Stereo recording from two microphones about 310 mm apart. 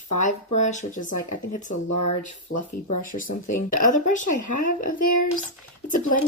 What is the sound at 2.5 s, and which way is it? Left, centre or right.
Speech, left.